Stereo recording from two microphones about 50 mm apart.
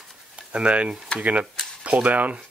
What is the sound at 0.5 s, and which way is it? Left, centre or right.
Speech, right.